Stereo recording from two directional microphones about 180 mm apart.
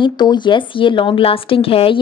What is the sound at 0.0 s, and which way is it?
A woman's voice, 25° left (ahead or behind).